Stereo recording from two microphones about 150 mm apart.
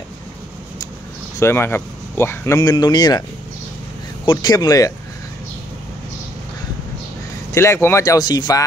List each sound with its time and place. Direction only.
1.4 s speech: 15° left (ahead or behind)
4.3 s speech: 25° left (ahead or behind)
7.5 s speech: 15° left (ahead or behind)